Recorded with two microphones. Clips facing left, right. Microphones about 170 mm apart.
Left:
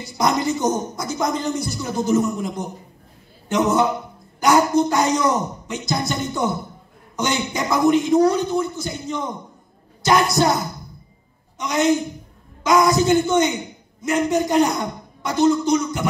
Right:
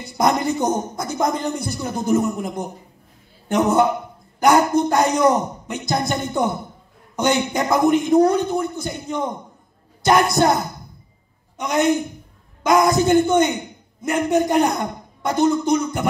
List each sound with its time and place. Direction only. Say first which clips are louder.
0.0 s a man's voice: right 1 dB; 55° right (ahead or behind)